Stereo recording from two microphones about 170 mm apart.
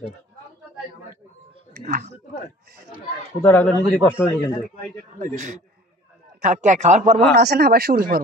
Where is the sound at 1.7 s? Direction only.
60° right (ahead or behind).